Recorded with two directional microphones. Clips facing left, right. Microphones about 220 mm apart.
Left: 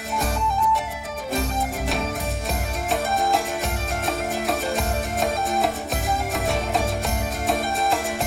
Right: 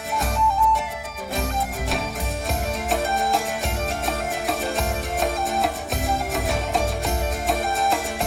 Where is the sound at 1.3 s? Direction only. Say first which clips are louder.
Left 1 dB; centre (ahead or behind).